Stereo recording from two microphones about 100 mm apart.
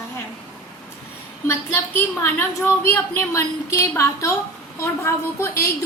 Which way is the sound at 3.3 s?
30° left (ahead or behind).